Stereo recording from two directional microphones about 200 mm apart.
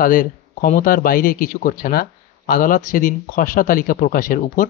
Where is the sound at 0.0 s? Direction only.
45° left (ahead or behind).